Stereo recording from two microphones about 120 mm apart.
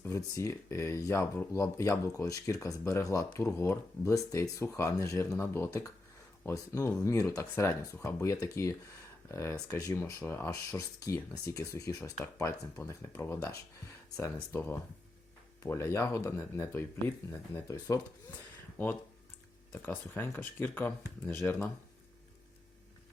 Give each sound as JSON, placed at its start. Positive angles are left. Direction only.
{"t": 0.1, "sound": "speech", "side_deg": 25}
{"t": 19.7, "sound": "speech", "side_deg": 15}